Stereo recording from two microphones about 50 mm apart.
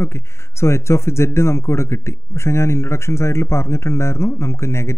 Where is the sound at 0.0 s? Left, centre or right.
Left.